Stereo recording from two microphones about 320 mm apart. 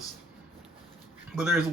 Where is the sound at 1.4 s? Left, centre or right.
Centre.